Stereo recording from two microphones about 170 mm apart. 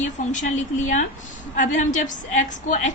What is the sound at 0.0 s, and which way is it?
A woman's voice, 45° left (ahead or behind).